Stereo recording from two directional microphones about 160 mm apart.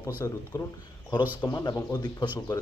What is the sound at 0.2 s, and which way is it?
Speech, 20° left (ahead or behind).